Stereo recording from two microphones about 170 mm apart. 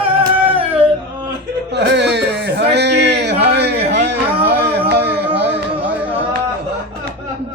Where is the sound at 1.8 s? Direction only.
90° right.